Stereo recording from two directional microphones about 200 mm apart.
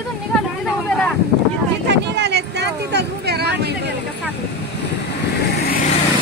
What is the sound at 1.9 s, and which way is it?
Speech, 60° right (ahead or behind).